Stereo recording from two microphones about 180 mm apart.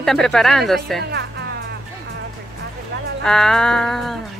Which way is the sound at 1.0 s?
65° right (ahead or behind).